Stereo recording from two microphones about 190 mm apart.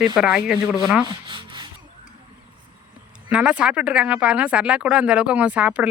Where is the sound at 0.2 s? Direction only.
5° right (ahead or behind).